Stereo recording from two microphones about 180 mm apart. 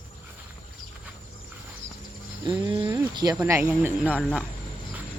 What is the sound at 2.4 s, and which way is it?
Speech, 25° right (ahead or behind).